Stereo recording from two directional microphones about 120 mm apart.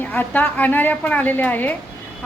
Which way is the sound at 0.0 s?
15° left (ahead or behind).